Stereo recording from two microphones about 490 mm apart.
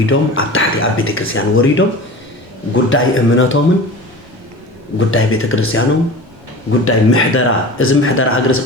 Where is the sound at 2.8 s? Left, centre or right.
Left.